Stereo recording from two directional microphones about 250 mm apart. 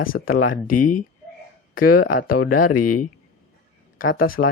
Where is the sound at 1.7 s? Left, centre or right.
Left.